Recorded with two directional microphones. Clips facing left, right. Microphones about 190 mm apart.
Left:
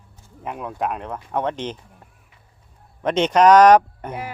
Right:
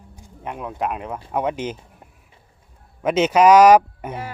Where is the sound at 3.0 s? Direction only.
5° right (ahead or behind).